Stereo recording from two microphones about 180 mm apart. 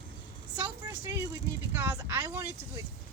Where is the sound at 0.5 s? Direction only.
10° right (ahead or behind).